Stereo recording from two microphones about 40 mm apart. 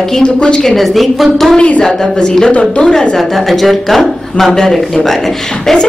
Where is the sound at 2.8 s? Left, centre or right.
Centre.